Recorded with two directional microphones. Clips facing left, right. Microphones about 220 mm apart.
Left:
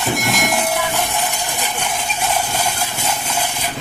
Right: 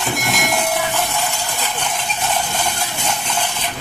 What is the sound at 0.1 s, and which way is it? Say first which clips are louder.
Train: left 2 dB; centre (ahead or behind).